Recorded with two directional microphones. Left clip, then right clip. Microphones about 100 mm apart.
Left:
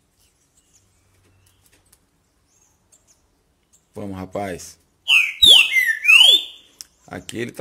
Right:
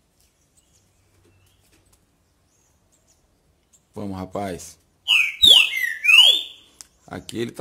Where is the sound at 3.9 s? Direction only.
20° right (ahead or behind).